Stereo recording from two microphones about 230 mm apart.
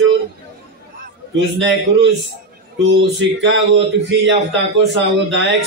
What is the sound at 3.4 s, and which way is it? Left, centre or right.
Speech, right.